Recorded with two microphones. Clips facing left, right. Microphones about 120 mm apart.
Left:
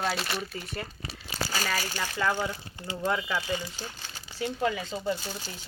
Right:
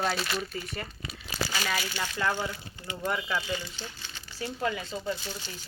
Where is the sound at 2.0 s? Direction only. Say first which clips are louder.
Left 3 dB; 10° left (ahead or behind).